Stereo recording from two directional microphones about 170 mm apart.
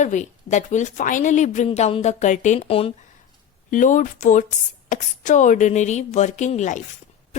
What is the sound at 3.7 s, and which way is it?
A woman's voice, 50° left (ahead or behind).